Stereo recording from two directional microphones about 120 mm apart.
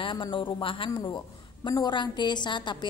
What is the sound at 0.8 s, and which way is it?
A woman's voice, 35° left (ahead or behind).